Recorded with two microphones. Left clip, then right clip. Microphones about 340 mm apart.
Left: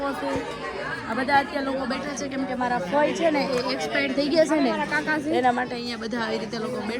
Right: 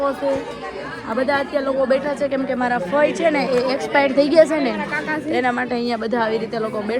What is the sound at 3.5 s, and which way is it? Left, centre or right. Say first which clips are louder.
Speech: right 7 dB; centre.